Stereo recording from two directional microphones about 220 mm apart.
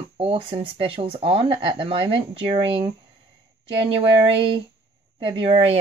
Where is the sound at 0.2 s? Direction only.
25° right (ahead or behind).